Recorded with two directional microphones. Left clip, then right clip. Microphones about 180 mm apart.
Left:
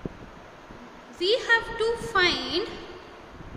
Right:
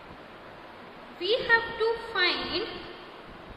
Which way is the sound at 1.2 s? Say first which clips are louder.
Left 2 dB; 70° left (ahead or behind).